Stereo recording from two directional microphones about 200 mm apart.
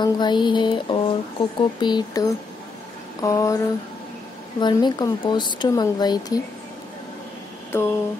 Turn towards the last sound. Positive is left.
turn(degrees=10)  # may be behind; listen again after turning